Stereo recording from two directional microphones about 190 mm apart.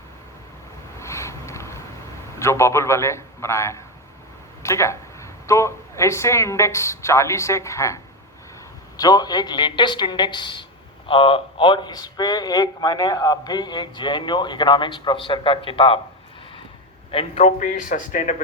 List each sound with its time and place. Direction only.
0.9 s vehicle: 15° left (ahead or behind)
2.4 s speech: 15° left (ahead or behind)
9.0 s a woman's voice: 20° left (ahead or behind)
17.1 s a man's voice: 30° left (ahead or behind)